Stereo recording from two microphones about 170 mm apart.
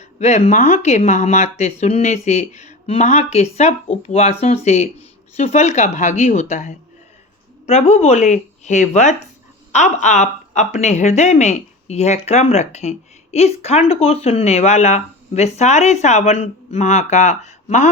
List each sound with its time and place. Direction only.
0.0 s a woman's voice: 40° left (ahead or behind)